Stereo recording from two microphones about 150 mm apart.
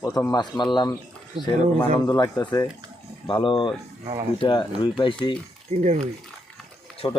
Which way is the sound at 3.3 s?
35° left (ahead or behind).